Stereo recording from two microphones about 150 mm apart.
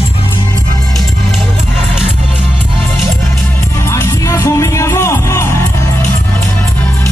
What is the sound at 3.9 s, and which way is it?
Music, 20° left (ahead or behind).